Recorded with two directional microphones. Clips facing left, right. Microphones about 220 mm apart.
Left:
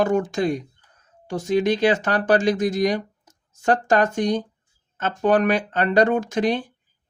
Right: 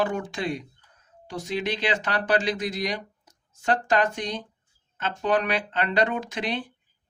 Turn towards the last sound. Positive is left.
turn(degrees=45)  # may be behind; listen again after turning